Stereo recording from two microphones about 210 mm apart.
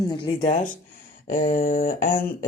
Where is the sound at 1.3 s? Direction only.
40° left (ahead or behind).